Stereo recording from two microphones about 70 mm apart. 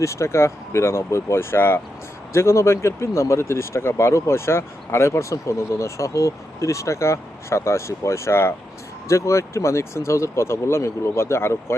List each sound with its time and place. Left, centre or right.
0.0 s speech: left